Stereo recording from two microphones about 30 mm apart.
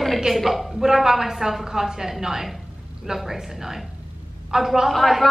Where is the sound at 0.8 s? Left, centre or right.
Centre.